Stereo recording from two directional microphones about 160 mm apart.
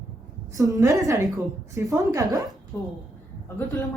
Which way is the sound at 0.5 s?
20° right (ahead or behind).